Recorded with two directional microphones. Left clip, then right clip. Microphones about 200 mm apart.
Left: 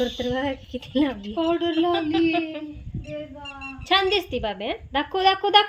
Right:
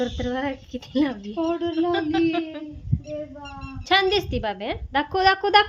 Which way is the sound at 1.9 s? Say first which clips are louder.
Even; centre (ahead or behind).